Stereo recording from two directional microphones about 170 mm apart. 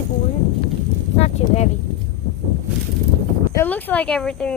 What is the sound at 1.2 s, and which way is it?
Speech, 40° left (ahead or behind).